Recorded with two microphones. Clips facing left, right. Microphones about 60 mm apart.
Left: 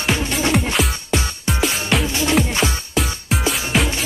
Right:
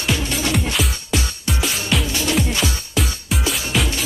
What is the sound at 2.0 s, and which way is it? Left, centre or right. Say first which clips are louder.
Music: left 2 dB; left.